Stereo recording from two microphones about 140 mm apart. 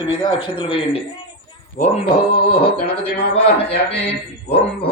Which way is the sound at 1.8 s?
90° left.